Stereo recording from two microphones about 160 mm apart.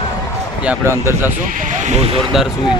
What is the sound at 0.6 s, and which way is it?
Speech, 15° right (ahead or behind).